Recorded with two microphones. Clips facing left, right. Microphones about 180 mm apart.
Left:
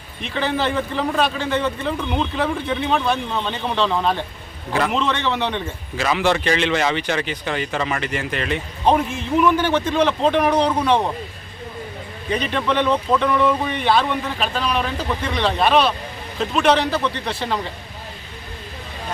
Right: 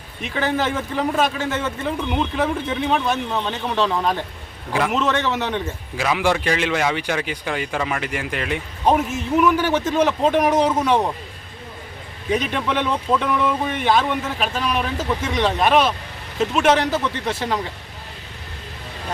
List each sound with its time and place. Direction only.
0.2 s a man's voice: 10° right (ahead or behind)
12.3 s a man's voice: 10° right (ahead or behind)